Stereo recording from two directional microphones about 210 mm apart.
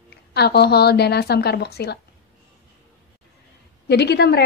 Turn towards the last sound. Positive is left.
turn(degrees=50)  # may be behind; listen again after turning